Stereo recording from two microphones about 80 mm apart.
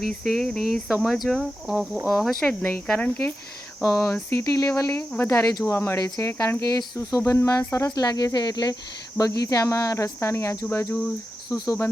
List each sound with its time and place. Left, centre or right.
0.1 s speech: centre
3.8 s speech: left
4.9 s speech: left
5.3 s speech: left
5.6 s speech: left
6.0 s speech: left
7.2 s speech: left
7.9 s speech: left
9.1 s speech: left
11.5 s speech: left